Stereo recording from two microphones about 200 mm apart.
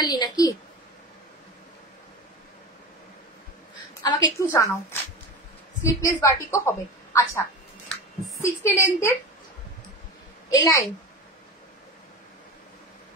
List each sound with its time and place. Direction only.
0.0 s a woman's voice: 20° left (ahead or behind)
4.0 s a woman's voice: 20° left (ahead or behind)
5.8 s a woman's voice: 15° left (ahead or behind)
7.9 s a sound: 15° left (ahead or behind)
10.5 s a woman's voice: 15° left (ahead or behind)